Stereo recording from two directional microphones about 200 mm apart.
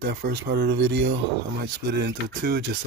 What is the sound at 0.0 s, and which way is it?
Speech, 55° right (ahead or behind).